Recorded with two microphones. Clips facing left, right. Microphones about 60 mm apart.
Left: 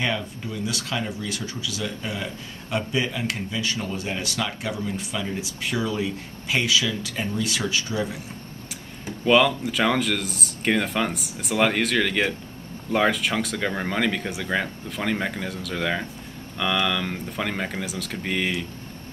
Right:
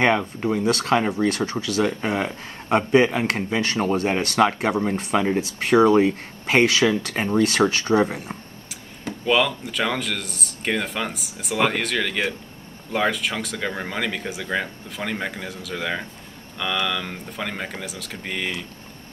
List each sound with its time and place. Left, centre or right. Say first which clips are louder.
0.0 s speech: right 8 dB; right
9.2 s speech: left 2 dB; centre